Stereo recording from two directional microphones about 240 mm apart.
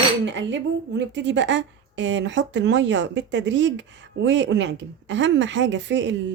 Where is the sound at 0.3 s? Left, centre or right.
Right.